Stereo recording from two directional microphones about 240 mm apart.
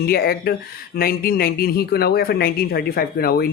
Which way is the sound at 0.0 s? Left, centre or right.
Left.